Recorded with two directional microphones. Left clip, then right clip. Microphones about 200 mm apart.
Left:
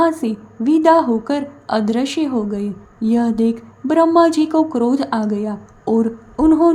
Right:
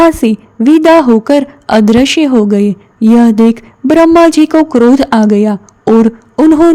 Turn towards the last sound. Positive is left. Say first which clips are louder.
# right 7 dB
turn(degrees=-40)  # may be behind; listen again after turning